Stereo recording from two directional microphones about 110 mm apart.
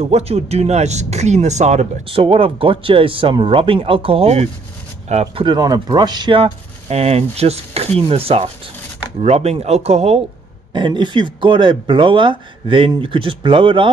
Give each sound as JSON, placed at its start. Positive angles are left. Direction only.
{"t": 0.0, "sound": "speech", "side_deg": -70}
{"t": 2.0, "sound": "speech", "side_deg": -55}
{"t": 5.0, "sound": "speech", "side_deg": -85}
{"t": 5.3, "sound": "speech", "side_deg": -45}
{"t": 6.3, "sound": "speech", "side_deg": -65}
{"t": 10.7, "sound": "speech", "side_deg": -45}